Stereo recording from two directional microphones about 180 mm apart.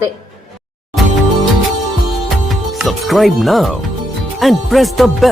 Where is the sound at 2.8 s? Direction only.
Centre (ahead or behind).